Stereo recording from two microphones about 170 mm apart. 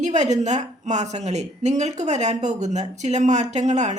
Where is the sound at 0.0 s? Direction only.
40° right (ahead or behind).